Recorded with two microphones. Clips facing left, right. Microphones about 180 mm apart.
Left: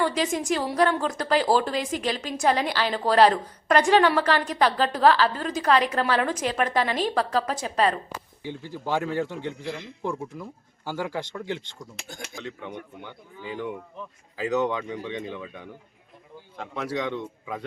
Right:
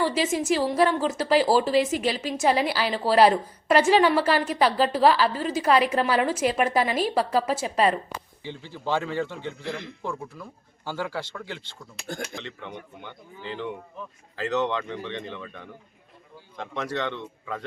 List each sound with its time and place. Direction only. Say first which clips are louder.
0.0 s a woman's voice: right 1 dB; 5° right (ahead or behind)
8.4 s a man's voice: left 3 dB; 10° left (ahead or behind)
12.0 s speech: right 11 dB; 60° right (ahead or behind)
12.4 s a man's voice: left 2 dB; 10° left (ahead or behind)